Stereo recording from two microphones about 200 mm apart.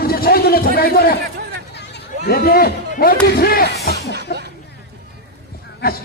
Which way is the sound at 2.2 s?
50° left (ahead or behind).